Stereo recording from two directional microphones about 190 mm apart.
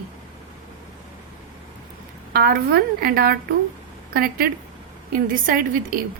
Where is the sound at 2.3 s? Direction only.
55° right (ahead or behind).